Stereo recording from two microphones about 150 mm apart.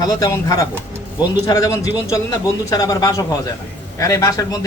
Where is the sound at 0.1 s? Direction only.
25° left (ahead or behind).